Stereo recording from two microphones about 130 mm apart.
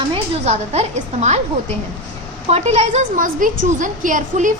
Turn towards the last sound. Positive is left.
turn(degrees=-90)